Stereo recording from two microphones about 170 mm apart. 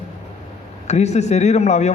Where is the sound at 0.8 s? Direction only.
40° left (ahead or behind).